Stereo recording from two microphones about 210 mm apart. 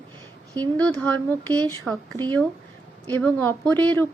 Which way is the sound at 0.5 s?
5° left (ahead or behind).